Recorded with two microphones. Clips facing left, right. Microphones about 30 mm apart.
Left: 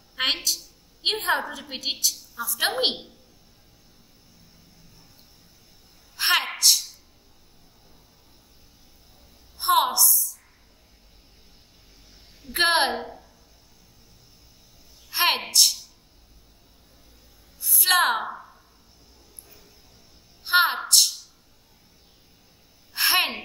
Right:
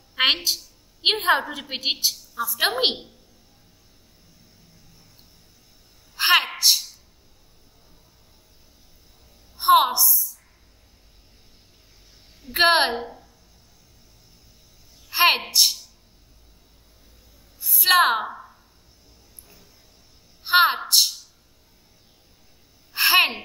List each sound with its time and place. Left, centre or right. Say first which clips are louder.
0.1 s a woman's voice: right 5 dB; right
2.3 s a woman's voice: right 4 dB; centre
6.1 s a sound: right 4 dB; centre
9.6 s a woman's voice: right 4 dB; centre
12.4 s a woman's voice: right 3 dB; centre
12.9 s speech: right 1 dB; centre
15.0 s a sound: right 4 dB; centre
15.5 s a woman's voice: right 1 dB; centre
17.6 s a sound: even; centre
17.8 s a woman's voice: right 3 dB; centre
20.4 s a woman's voice: right 3 dB; centre
22.9 s a sound: right 4 dB; centre